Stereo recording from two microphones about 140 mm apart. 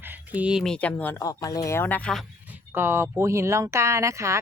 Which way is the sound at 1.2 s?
25° left (ahead or behind).